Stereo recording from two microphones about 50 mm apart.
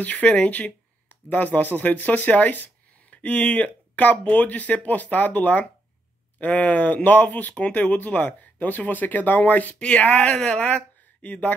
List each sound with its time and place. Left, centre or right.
0.0 s speech: left